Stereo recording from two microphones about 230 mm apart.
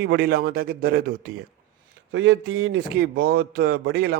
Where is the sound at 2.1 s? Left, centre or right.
Right.